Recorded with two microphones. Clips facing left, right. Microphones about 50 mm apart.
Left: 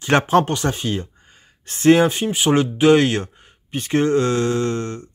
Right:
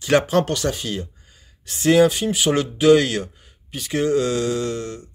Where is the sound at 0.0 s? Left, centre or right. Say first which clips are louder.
Left 2 dB; left.